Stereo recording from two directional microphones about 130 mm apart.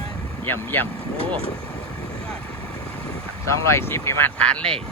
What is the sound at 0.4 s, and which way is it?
Speech, 15° left (ahead or behind).